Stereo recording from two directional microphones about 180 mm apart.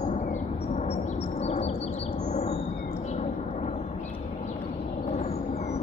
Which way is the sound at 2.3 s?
35° left (ahead or behind).